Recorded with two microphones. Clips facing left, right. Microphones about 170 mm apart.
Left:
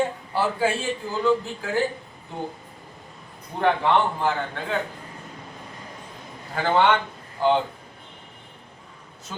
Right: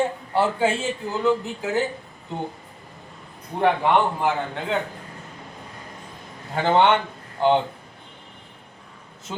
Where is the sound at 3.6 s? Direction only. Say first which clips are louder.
Right 1 dB; 15° right (ahead or behind).